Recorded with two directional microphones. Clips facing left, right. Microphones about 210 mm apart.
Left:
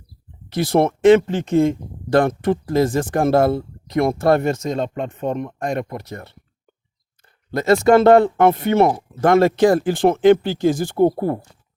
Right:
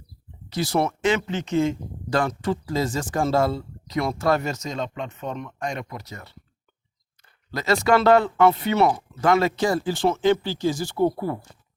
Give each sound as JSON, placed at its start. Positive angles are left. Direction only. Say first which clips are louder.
{"t": 0.5, "sound": "speech", "louder": "left 6 dB", "side_deg": 55}
{"t": 7.5, "sound": "speech", "louder": "left 7 dB", "side_deg": 50}